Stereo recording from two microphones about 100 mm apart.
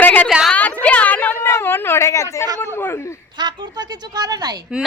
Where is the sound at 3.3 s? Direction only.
45° right (ahead or behind).